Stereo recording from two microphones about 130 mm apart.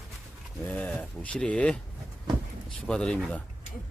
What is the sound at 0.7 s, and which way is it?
Speech, 10° left (ahead or behind).